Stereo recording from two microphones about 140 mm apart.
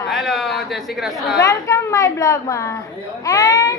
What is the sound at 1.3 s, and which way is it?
A woman's voice, 25° left (ahead or behind).